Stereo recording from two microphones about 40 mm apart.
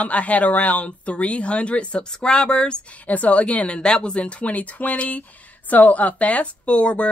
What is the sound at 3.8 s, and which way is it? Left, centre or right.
Speech, left.